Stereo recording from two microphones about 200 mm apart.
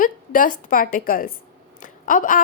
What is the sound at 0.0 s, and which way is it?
A woman's voice, 40° left (ahead or behind).